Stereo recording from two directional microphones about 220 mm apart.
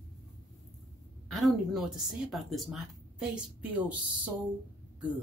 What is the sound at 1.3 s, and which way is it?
Speech, centre (ahead or behind).